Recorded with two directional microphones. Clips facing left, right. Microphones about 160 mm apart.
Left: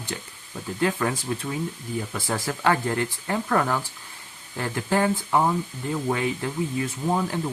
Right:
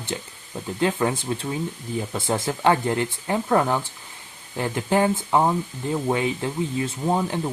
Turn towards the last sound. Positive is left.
turn(degrees=-20)  # may be behind; listen again after turning